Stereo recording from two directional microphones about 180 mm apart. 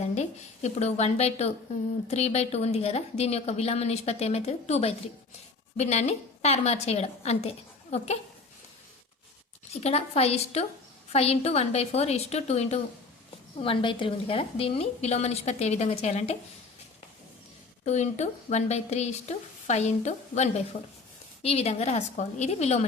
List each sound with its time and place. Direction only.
0.0 s a woman's voice: 40° left (ahead or behind)
9.8 s a woman's voice: 35° left (ahead or behind)
17.8 s a woman's voice: 40° left (ahead or behind)